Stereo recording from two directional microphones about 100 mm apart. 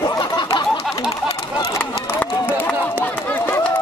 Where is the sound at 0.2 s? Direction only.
45° left (ahead or behind).